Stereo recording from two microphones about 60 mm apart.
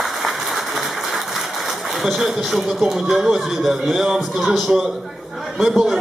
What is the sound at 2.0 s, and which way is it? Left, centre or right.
Speech, centre.